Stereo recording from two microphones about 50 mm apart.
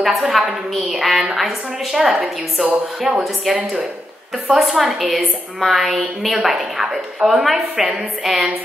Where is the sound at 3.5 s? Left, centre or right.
Centre.